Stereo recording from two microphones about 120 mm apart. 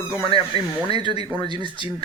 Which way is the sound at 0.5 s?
55° left (ahead or behind).